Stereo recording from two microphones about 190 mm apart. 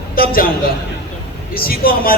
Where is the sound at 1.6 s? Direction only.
50° left (ahead or behind).